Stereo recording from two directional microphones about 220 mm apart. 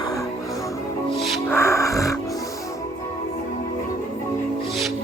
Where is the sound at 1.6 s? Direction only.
15° left (ahead or behind).